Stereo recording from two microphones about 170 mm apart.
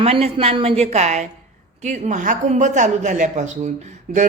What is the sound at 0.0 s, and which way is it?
A woman's voice, 35° right (ahead or behind).